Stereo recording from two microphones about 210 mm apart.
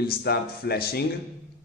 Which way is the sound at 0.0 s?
50° left (ahead or behind).